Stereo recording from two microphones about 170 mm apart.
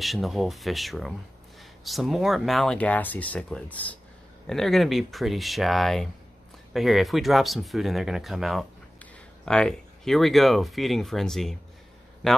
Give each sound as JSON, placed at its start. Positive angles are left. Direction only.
{"t": 0.0, "sound": "speech", "side_deg": 0}